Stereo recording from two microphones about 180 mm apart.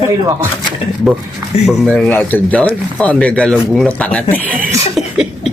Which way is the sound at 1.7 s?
5° left (ahead or behind).